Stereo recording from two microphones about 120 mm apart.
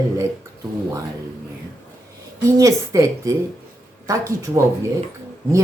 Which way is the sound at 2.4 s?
30° right (ahead or behind).